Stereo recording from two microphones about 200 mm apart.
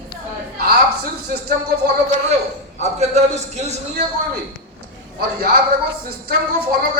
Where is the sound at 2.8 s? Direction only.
35° right (ahead or behind).